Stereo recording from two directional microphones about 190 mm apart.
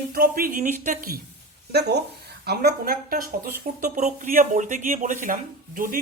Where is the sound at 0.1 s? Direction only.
50° right (ahead or behind).